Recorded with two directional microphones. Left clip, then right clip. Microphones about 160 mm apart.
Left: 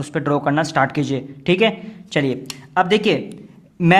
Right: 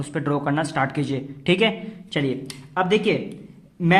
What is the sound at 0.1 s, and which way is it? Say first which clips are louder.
A man's voice: left 5 dB; 30° left (ahead or behind).